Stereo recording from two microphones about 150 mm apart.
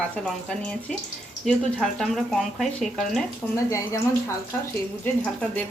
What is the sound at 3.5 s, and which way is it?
Speech, 20° left (ahead or behind).